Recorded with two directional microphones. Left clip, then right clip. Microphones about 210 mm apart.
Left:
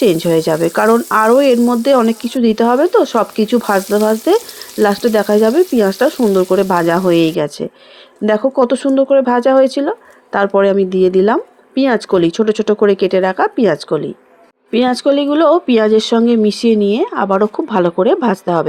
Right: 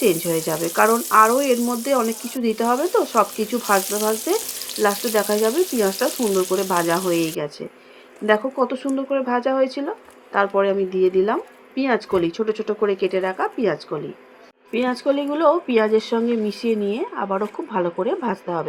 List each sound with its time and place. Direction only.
0.0 s speech: 40° left (ahead or behind)